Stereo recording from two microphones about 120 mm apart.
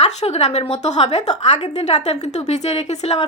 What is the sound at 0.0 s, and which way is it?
A woman's voice, 65° left (ahead or behind).